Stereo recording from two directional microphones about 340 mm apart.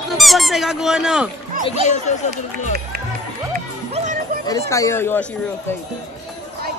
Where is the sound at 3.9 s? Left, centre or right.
Right.